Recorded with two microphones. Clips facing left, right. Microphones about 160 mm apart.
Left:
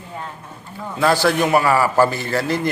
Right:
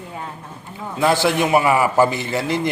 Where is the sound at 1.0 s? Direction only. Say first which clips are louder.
Left 1 dB; 20° right (ahead or behind).